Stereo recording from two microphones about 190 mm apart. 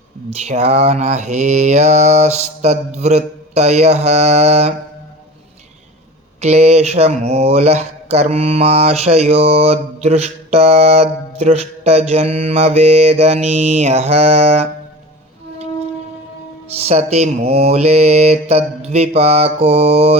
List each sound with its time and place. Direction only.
0.3 s speech: 35° right (ahead or behind)
6.4 s speech: 35° right (ahead or behind)
16.8 s speech: 35° right (ahead or behind)